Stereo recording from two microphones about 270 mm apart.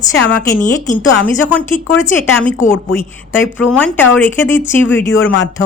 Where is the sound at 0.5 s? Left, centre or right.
Left.